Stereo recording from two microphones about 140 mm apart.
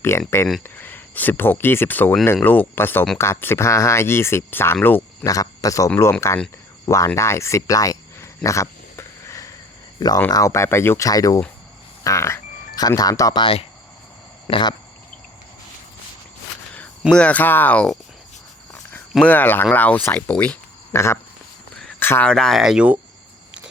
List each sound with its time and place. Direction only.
0.0 s speech: 20° left (ahead or behind)
8.4 s wild animals: 20° left (ahead or behind)
10.0 s speech: 30° left (ahead or behind)
13.4 s speech: 45° left (ahead or behind)
14.4 s speech: 30° left (ahead or behind)
17.1 s speech: 10° left (ahead or behind)
18.7 s cricket: 15° left (ahead or behind)
19.2 s speech: 10° left (ahead or behind)
20.9 s speech: 20° left (ahead or behind); by 23.0 s 5° right (ahead or behind)